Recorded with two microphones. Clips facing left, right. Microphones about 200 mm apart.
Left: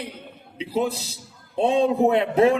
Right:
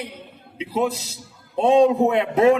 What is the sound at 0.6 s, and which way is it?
A man's voice, 35° left (ahead or behind).